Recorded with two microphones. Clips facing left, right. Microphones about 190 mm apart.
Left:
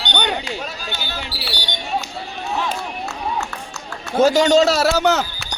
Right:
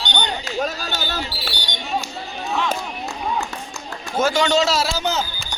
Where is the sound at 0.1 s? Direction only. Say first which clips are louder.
Left 4 dB; 60° left (ahead or behind).